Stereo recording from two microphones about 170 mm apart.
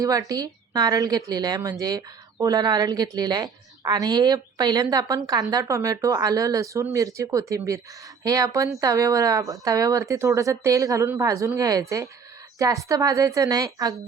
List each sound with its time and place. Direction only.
0.0 s a woman's voice: 20° right (ahead or behind)